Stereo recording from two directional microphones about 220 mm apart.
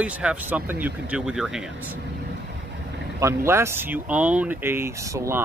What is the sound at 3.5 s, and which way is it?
Speech, 10° right (ahead or behind).